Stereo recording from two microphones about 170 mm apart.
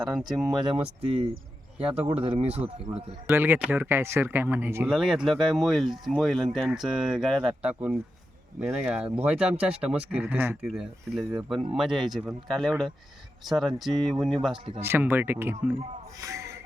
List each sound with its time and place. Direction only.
0.0 s speech: centre (ahead or behind)
0.4 s speech: 25° right (ahead or behind)
1.8 s speech: 35° right (ahead or behind)
3.2 s speech: 10° right (ahead or behind)
9.0 s speech: 10° right (ahead or behind)
14.8 s speech: 15° right (ahead or behind)